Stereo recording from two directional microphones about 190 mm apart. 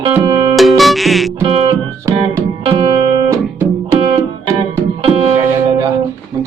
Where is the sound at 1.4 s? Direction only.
25° right (ahead or behind).